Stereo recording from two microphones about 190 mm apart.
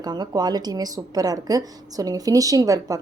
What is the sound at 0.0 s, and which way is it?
A woman's voice, 20° right (ahead or behind).